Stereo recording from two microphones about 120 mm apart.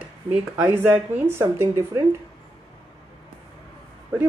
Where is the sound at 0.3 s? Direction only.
15° right (ahead or behind).